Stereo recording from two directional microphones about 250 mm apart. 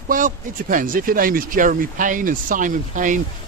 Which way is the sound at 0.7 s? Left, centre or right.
Right.